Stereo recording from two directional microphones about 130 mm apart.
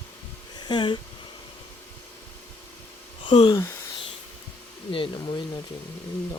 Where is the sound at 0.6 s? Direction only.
35° left (ahead or behind).